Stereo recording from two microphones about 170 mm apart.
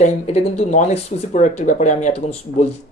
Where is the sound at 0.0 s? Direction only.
40° left (ahead or behind).